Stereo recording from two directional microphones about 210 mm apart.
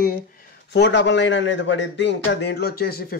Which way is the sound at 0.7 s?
55° left (ahead or behind).